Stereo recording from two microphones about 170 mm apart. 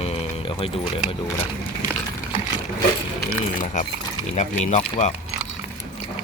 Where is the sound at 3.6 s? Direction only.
50° left (ahead or behind).